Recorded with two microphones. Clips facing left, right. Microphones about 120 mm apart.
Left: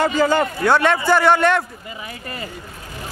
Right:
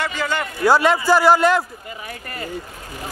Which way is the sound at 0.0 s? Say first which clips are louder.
Left 7 dB; 40° left (ahead or behind).